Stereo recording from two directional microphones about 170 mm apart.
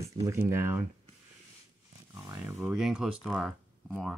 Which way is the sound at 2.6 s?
5° right (ahead or behind).